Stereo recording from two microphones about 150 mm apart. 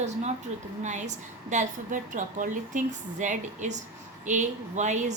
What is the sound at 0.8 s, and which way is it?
A woman's voice, 55° right (ahead or behind).